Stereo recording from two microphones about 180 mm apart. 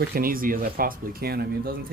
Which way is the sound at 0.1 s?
55° right (ahead or behind).